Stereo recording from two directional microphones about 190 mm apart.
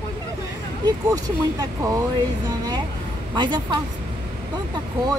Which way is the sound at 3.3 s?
25° right (ahead or behind).